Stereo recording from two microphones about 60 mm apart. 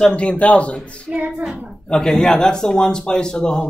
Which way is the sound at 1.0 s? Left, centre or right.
Right.